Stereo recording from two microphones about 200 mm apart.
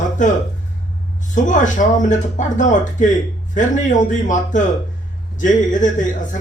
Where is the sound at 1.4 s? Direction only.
40° left (ahead or behind).